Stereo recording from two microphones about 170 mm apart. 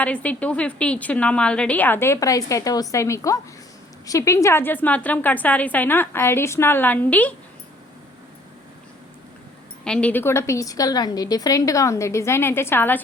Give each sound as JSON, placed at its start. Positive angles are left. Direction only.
{"t": 0.0, "sound": "a woman's voice", "side_deg": 10}
{"t": 9.8, "sound": "a woman's voice", "side_deg": 5}